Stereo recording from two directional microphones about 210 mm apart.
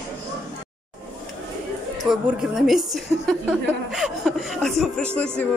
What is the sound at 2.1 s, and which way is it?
A woman's voice, centre (ahead or behind).